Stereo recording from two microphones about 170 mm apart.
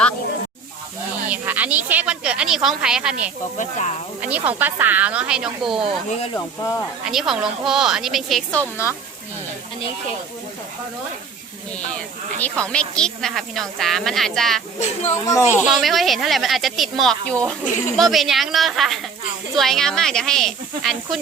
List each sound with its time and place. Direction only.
1.3 s speech: 10° right (ahead or behind)
3.6 s speech: 45° left (ahead or behind)
4.2 s speech: 10° right (ahead or behind)
6.3 s speech: 15° left (ahead or behind)
7.0 s speech: centre (ahead or behind)
11.9 s speech: 5° left (ahead or behind)
14.8 s speech: 40° left (ahead or behind)
15.2 s speech: 20° left (ahead or behind)
15.6 s speech: centre (ahead or behind)